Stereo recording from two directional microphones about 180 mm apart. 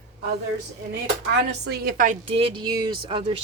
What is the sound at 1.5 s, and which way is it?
Speech, 65° right (ahead or behind).